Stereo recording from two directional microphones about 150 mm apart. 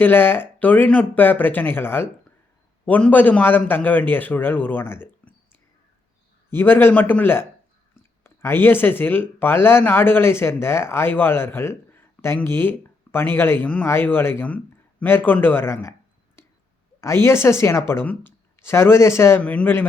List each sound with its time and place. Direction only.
0.0 s speech: 15° left (ahead or behind)